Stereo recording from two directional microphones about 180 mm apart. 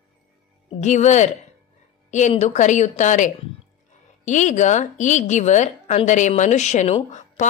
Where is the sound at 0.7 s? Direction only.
40° left (ahead or behind).